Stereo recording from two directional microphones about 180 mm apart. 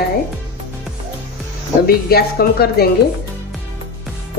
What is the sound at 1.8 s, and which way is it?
A woman's voice, 55° left (ahead or behind).